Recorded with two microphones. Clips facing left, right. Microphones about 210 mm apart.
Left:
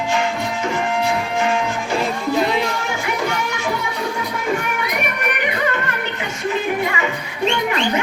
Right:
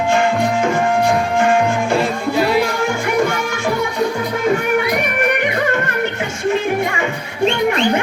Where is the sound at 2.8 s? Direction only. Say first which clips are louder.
Right 6 dB; 50° right (ahead or behind).